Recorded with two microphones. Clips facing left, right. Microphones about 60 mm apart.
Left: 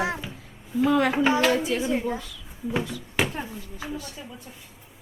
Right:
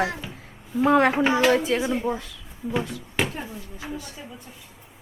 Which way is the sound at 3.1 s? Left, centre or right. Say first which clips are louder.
Even; centre.